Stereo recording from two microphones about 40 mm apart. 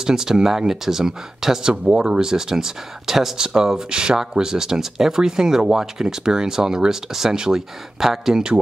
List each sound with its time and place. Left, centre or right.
0.0 s speech: centre